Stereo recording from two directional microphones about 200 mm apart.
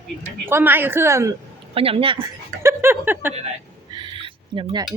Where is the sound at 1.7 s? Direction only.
30° right (ahead or behind).